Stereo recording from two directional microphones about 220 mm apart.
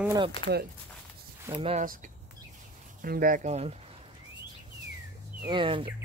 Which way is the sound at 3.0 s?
40° right (ahead or behind).